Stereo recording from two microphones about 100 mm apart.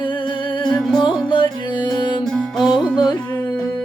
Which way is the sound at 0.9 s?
55° left (ahead or behind).